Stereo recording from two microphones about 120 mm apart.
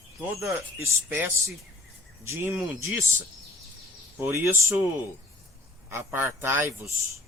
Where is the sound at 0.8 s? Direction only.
25° right (ahead or behind).